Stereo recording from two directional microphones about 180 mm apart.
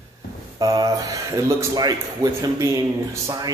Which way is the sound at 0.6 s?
20° right (ahead or behind).